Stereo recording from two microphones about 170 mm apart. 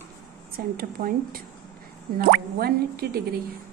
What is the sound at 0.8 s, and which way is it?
Speech, 60° right (ahead or behind).